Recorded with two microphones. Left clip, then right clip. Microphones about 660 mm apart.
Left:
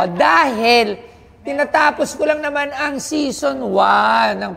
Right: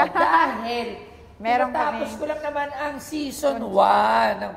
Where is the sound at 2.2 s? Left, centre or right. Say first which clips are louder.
Left 9 dB; left.